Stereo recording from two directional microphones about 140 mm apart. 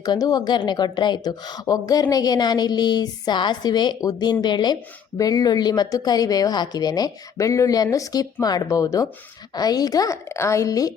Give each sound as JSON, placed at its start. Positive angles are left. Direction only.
{"t": 0.0, "sound": "a woman's voice", "side_deg": 30}